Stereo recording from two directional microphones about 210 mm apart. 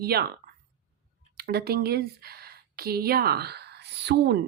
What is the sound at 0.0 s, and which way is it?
A woman's voice, 50° right (ahead or behind).